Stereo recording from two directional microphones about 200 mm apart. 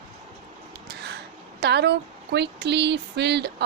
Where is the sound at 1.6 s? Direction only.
55° right (ahead or behind).